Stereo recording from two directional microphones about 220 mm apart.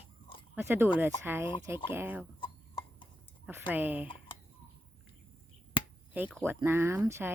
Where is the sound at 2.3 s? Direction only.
25° left (ahead or behind).